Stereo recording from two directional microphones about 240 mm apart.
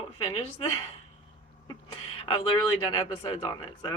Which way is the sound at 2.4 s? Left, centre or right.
Left.